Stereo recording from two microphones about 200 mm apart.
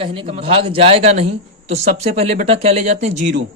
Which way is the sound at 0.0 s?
25° right (ahead or behind).